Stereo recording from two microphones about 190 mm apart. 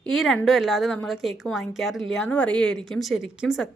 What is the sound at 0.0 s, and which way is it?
A woman's voice, centre (ahead or behind).